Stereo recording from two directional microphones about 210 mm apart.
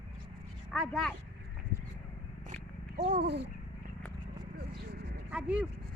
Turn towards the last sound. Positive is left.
turn(degrees=-5)  # may be behind; listen again after turning